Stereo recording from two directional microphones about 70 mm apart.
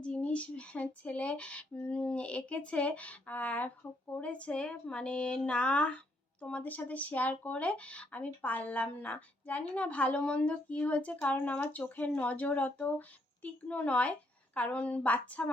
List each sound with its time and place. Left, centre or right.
0.0 s speech: centre